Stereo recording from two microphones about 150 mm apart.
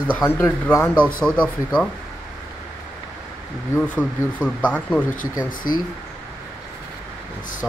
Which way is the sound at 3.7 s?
10° left (ahead or behind).